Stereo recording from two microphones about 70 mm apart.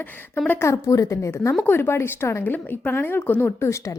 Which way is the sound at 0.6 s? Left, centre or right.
Left.